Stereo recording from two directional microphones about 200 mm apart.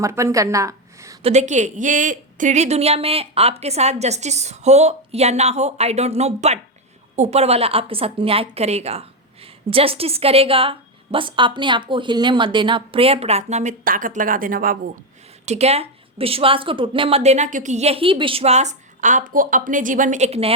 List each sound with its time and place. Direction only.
0.0 s a woman's voice: 15° right (ahead or behind)
1.2 s a woman's voice: 35° right (ahead or behind)
15.4 s a woman's voice: 30° right (ahead or behind)